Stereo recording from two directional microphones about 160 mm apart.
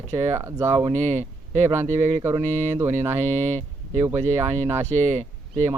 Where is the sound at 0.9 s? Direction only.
45° right (ahead or behind).